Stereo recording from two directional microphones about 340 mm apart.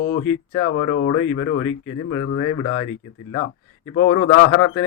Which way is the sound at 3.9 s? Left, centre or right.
Left.